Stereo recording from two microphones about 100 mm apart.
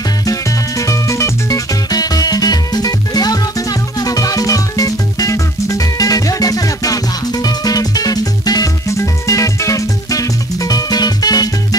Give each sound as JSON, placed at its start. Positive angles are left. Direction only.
{"t": 0.3, "sound": "music", "side_deg": 35}